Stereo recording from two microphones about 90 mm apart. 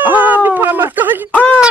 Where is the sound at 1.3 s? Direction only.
15° left (ahead or behind).